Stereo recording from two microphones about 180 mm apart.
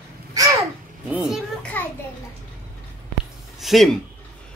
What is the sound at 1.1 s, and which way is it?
Speech, centre (ahead or behind).